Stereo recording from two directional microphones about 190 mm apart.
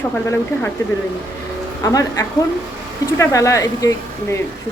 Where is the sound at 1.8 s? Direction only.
15° left (ahead or behind).